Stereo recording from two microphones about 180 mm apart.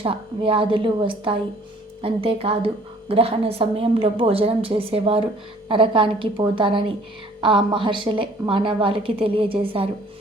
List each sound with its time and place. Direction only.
0.0 s a woman's voice: 30° right (ahead or behind)